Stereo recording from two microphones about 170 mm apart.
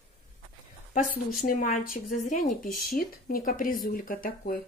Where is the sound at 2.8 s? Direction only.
60° left (ahead or behind).